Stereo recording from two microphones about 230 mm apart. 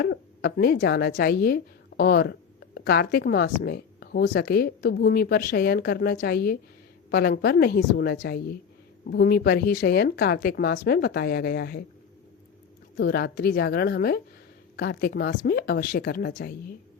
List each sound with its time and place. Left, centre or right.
0.0 s speech: left
13.0 s speech: left